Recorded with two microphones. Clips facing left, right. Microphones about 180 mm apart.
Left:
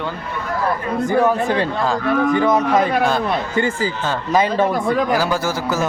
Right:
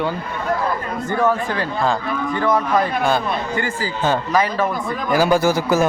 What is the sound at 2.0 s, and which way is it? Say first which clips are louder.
Speech: left 7 dB; 65° left (ahead or behind).